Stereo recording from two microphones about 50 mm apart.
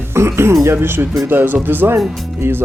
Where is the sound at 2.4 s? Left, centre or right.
Right.